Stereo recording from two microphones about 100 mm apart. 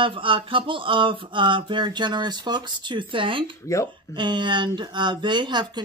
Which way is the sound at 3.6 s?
30° left (ahead or behind).